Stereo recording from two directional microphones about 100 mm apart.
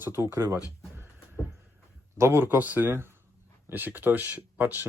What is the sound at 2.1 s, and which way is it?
Speech, 25° right (ahead or behind).